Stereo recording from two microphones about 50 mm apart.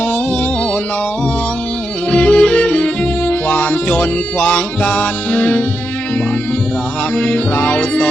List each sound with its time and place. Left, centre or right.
2.0 s music: left
7.2 s music: left